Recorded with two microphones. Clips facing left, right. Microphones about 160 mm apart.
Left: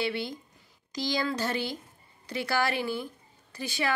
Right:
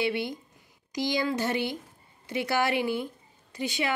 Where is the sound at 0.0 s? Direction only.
15° right (ahead or behind).